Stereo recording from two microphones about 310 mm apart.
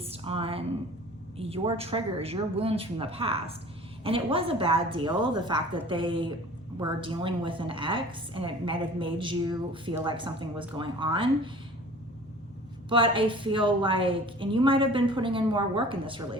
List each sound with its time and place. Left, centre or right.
0.0 s a sound: centre
1.4 s a woman's voice: centre
12.9 s a woman's voice: centre